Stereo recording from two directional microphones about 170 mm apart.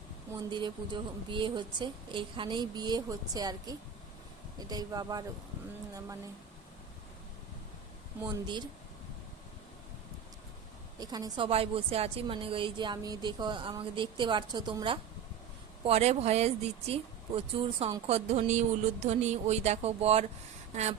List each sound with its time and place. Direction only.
0.5 s a woman's voice: 25° right (ahead or behind)
8.2 s a woman's voice: 25° right (ahead or behind)
11.0 s a woman's voice: 25° right (ahead or behind)
15.8 s speech: 40° right (ahead or behind)